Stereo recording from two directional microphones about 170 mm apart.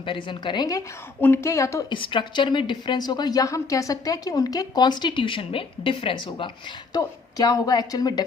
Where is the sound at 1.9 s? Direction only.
30° left (ahead or behind).